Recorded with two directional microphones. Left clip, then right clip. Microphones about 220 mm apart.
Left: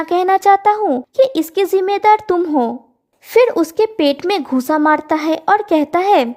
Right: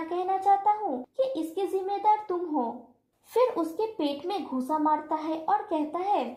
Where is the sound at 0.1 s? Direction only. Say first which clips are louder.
Left 13 dB; 40° left (ahead or behind).